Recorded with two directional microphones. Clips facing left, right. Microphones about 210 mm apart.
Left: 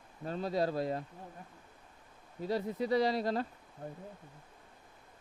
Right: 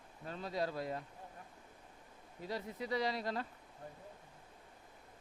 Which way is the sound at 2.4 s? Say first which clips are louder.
Left 8 dB; 35° left (ahead or behind).